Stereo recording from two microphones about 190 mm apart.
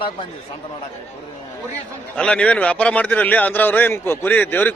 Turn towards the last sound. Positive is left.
turn(degrees=10)  # may be behind; listen again after turning